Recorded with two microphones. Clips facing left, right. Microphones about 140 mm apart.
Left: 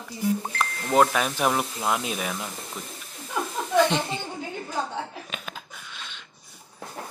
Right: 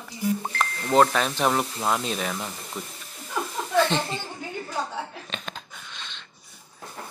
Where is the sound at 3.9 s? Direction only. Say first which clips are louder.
Even; 15° left (ahead or behind).